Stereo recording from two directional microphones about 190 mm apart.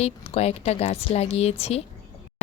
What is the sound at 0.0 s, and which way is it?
Speech, 35° left (ahead or behind).